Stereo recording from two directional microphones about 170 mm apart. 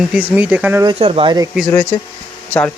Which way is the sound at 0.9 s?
35° right (ahead or behind).